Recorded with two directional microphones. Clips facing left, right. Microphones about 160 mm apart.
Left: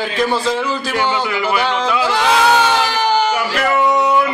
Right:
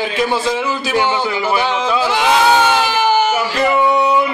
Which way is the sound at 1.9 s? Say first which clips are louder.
Right 1 dB; 20° right (ahead or behind).